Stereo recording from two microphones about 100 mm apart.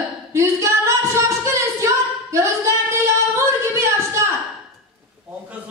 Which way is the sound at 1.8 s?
30° right (ahead or behind).